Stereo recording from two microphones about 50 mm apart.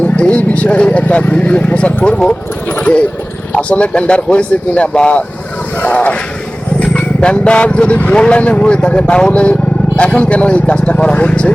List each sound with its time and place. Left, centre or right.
0.0 s speech: left
3.5 s speech: left